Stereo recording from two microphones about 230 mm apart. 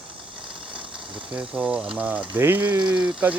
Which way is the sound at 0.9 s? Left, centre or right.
Centre.